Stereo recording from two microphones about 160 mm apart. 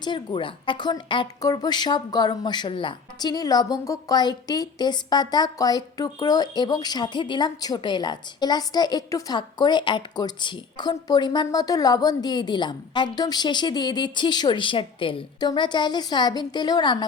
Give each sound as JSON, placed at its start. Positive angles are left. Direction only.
{"t": 0.0, "sound": "a woman's voice", "side_deg": 30}